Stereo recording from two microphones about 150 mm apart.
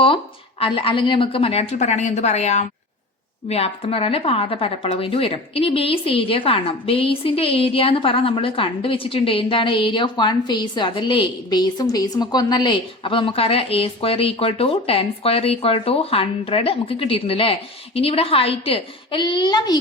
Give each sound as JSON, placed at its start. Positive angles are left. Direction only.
{"t": 0.6, "sound": "a woman's voice", "side_deg": 35}